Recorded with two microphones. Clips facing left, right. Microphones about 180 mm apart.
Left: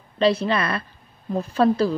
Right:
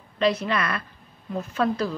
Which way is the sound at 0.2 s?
30° left (ahead or behind).